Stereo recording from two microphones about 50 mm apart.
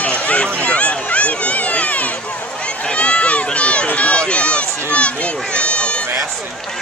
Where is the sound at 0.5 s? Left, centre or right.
Left.